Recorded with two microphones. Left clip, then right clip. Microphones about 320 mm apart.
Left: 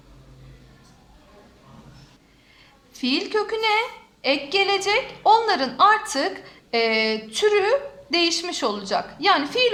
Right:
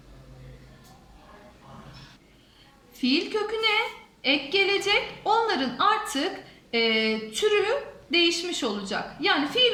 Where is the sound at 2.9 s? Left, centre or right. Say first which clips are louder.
Left 3 dB; centre.